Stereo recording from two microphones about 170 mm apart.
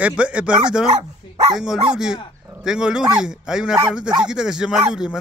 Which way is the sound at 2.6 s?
5° right (ahead or behind).